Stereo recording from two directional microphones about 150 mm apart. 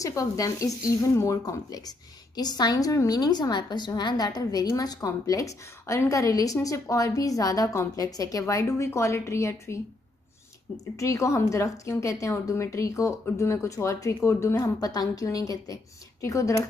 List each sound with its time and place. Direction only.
0.0 s speech: 20° left (ahead or behind)
11.0 s speech: 20° left (ahead or behind)